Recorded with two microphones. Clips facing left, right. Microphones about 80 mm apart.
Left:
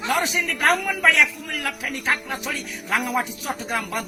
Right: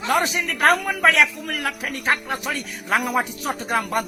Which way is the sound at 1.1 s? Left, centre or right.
Centre.